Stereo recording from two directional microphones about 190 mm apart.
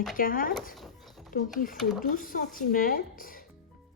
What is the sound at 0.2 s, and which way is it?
Speech, 45° left (ahead or behind).